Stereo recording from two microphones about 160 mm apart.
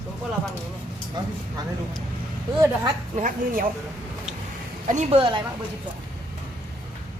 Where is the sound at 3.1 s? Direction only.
55° right (ahead or behind).